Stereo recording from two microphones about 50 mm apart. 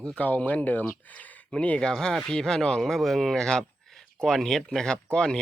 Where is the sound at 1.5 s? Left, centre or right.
Left.